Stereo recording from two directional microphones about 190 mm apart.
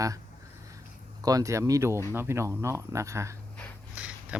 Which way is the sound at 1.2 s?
15° right (ahead or behind).